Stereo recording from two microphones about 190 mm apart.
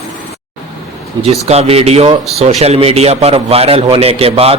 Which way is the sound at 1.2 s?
35° right (ahead or behind).